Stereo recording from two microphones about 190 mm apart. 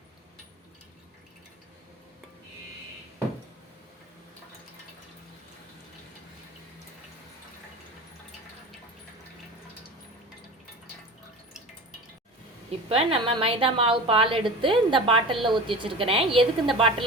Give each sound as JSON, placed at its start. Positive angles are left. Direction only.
{"t": 12.9, "sound": "a woman's voice", "side_deg": -30}